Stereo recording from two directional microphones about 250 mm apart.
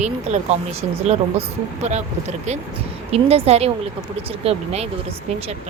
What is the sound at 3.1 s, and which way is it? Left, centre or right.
Speech, right.